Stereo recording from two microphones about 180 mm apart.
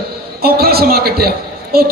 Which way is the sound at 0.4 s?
60° right (ahead or behind).